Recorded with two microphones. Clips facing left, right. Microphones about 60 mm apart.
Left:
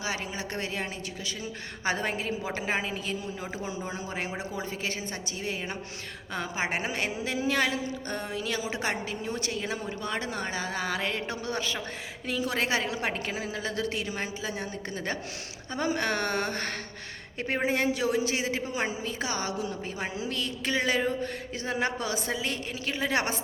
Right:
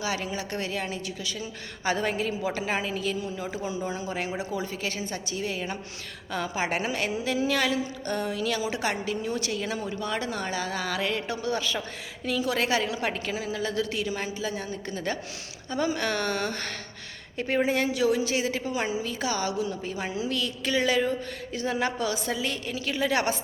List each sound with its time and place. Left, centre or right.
0.0 s a woman's voice: left